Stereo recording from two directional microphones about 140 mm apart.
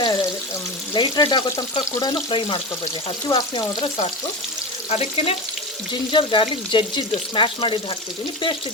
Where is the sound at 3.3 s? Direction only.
25° left (ahead or behind).